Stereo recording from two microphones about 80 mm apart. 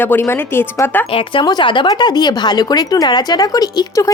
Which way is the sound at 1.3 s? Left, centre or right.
Left.